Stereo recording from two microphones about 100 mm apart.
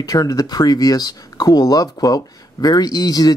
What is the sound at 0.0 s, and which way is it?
Speech, 40° left (ahead or behind).